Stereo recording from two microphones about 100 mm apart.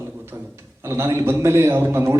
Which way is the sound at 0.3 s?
25° right (ahead or behind).